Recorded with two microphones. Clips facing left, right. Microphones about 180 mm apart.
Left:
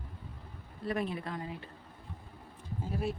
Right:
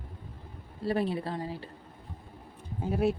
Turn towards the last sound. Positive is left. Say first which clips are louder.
# right 8 dB
turn(degrees=-70)  # may be behind; listen again after turning